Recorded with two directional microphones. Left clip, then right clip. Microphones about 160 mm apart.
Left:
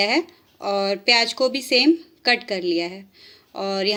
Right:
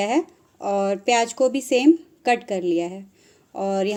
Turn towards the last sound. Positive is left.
turn(degrees=-40)  # may be behind; listen again after turning